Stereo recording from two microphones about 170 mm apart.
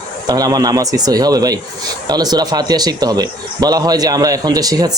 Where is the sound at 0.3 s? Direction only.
20° right (ahead or behind).